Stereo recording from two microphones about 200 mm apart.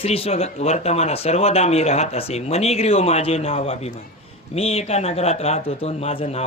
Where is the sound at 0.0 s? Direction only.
30° left (ahead or behind).